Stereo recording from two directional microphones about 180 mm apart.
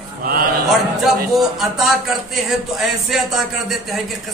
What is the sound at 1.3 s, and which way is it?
Speech, centre (ahead or behind).